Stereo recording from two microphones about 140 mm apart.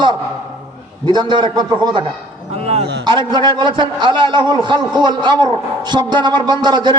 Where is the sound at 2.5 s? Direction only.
45° right (ahead or behind).